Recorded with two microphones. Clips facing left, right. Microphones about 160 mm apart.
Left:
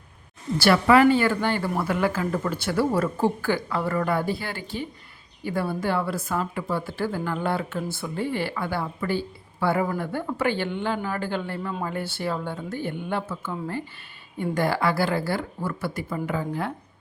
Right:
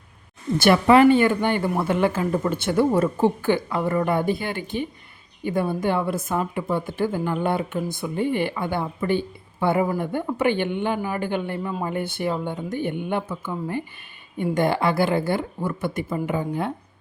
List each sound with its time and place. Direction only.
0.6 s speech: 20° right (ahead or behind)